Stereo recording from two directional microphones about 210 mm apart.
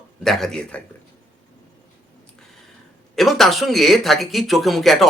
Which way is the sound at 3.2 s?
Centre (ahead or behind).